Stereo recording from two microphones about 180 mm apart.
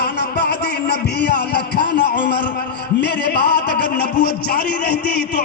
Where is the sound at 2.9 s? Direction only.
70° left (ahead or behind).